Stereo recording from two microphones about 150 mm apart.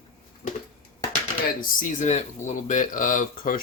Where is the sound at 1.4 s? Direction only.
60° left (ahead or behind).